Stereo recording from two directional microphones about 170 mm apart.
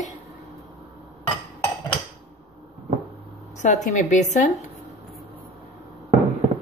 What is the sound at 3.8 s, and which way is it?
Speech, 45° left (ahead or behind).